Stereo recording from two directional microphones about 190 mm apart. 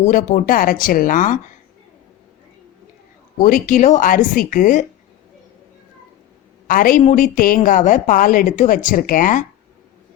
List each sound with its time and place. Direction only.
0.0 s a woman's voice: 45° left (ahead or behind)
3.3 s a woman's voice: 45° left (ahead or behind)
6.7 s a woman's voice: 45° left (ahead or behind)